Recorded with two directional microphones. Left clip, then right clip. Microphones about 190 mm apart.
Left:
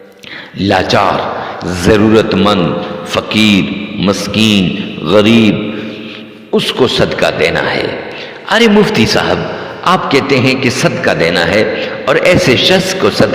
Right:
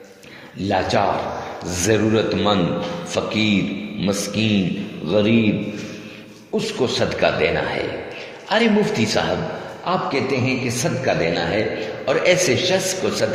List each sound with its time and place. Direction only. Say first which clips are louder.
0.6 s a man's voice: left 9 dB; 40° left (ahead or behind)
6.5 s a man's voice: left 10 dB; 50° left (ahead or behind)
9.8 s a man's voice: left 11 dB; 50° left (ahead or behind)